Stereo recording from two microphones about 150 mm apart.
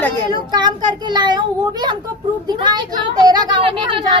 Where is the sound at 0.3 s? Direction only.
30° right (ahead or behind).